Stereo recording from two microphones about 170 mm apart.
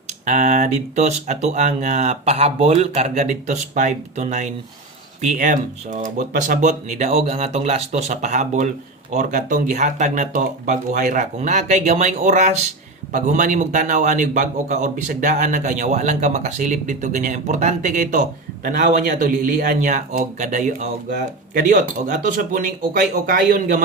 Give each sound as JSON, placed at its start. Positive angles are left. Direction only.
{"t": 0.1, "sound": "a man's voice", "side_deg": -45}